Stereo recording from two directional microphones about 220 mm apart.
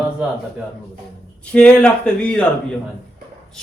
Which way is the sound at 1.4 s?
5° left (ahead or behind).